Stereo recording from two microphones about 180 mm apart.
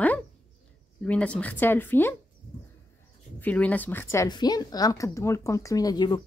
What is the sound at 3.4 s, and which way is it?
A woman's voice, 10° left (ahead or behind).